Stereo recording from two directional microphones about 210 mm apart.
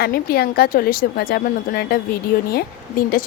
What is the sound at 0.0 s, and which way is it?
A woman's voice, 45° left (ahead or behind).